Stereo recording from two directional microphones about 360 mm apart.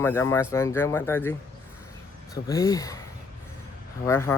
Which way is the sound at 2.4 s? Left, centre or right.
Centre.